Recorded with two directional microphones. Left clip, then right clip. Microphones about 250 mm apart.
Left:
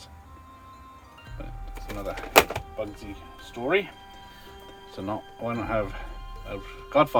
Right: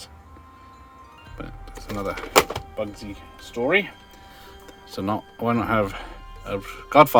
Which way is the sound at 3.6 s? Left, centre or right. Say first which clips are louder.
Right 6 dB; right.